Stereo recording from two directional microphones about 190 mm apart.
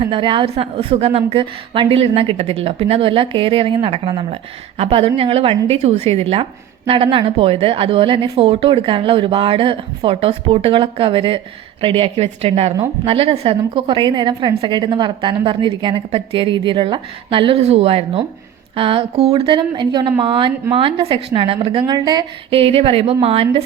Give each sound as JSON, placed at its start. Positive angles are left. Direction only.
{"t": 0.0, "sound": "a woman's voice", "side_deg": -25}